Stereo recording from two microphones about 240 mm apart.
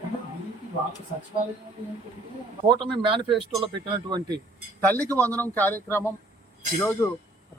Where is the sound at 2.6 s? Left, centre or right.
Centre.